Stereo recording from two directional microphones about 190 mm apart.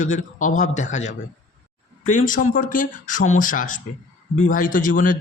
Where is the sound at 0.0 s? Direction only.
40° left (ahead or behind).